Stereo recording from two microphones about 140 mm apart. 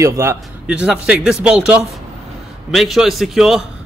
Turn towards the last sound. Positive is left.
turn(degrees=0)  # may be behind; listen again after turning